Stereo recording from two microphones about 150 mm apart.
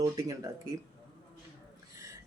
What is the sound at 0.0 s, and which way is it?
Speech, 25° right (ahead or behind).